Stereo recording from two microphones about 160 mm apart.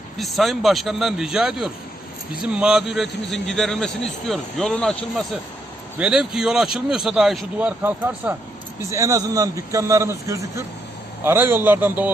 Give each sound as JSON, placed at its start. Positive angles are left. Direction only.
{"t": 0.2, "sound": "a man's voice", "side_deg": 0}
{"t": 7.8, "sound": "a man's voice", "side_deg": -15}